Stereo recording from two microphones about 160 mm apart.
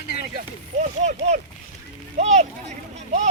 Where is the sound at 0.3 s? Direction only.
50° right (ahead or behind).